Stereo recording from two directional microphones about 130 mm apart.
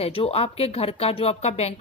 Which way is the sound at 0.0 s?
50° left (ahead or behind).